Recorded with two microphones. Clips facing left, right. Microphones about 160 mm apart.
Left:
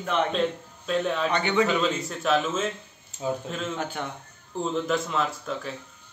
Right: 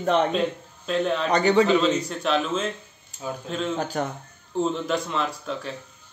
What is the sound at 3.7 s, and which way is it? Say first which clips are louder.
Speech: right 5 dB; 40° right (ahead or behind).